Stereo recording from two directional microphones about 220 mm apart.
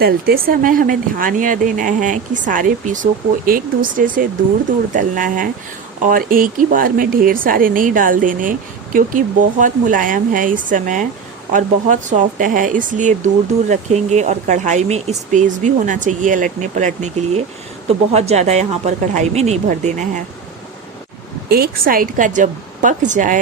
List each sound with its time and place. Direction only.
0.0 s speech: 40° right (ahead or behind)
21.5 s speech: 40° right (ahead or behind)